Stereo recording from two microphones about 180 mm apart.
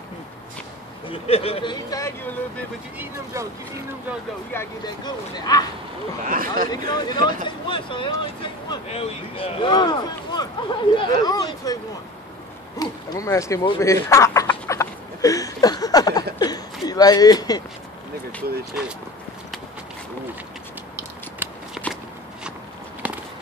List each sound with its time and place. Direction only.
1.0 s speech: 30° left (ahead or behind); by 2.3 s 15° left (ahead or behind)
3.3 s speech: 15° right (ahead or behind)
4.6 s speech: 20° left (ahead or behind)
6.2 s a man's voice: 50° right (ahead or behind)
6.7 s speech: 20° left (ahead or behind)
13.7 s a sound: 15° left (ahead or behind)
21.4 s scissors: 10° right (ahead or behind)